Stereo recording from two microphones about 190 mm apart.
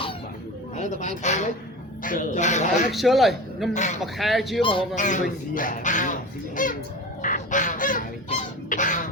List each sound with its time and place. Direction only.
0.8 s speech: 40° left (ahead or behind)
2.9 s a man's voice: centre (ahead or behind)
3.8 s speech: 40° left (ahead or behind)
4.0 s a man's voice: centre (ahead or behind)
4.9 s speech: 40° left (ahead or behind)
7.2 s goose: 45° left (ahead or behind)